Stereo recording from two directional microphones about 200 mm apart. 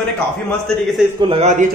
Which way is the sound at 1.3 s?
35° right (ahead or behind).